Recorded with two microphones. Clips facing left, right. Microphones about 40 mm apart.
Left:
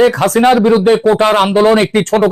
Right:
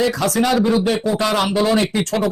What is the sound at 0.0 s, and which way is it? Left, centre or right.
A man's voice, left.